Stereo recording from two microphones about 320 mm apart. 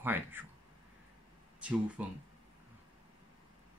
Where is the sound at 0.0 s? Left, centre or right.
Centre.